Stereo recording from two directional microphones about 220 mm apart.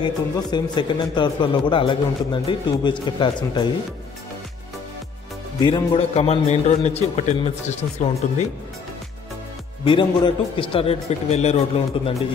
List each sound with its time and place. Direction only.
0.0 s a man's voice: 20° left (ahead or behind)
5.6 s a man's voice: 20° left (ahead or behind)
9.8 s a man's voice: 20° left (ahead or behind)